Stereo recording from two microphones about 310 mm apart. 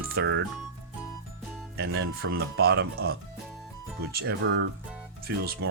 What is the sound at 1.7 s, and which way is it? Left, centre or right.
Speech, right.